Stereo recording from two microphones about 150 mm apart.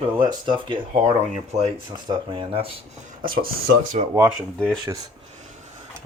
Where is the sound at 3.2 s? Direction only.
75° right (ahead or behind).